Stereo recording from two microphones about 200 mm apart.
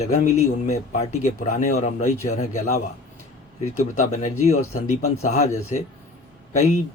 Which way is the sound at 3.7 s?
40° left (ahead or behind).